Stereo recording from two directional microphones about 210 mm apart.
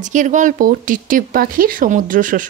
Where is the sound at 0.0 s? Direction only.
35° right (ahead or behind).